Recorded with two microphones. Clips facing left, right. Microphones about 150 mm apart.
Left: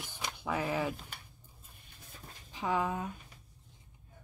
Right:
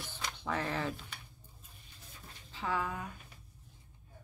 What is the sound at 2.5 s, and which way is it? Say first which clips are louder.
Speech: left 4 dB; 15° left (ahead or behind).